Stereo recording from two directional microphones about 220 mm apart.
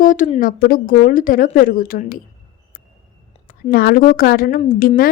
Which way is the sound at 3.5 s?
40° left (ahead or behind).